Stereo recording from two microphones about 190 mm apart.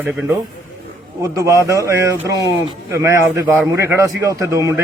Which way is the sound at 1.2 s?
15° right (ahead or behind).